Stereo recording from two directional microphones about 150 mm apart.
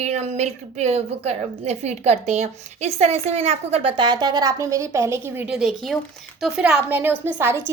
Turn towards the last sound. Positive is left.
turn(degrees=-15)  # may be behind; listen again after turning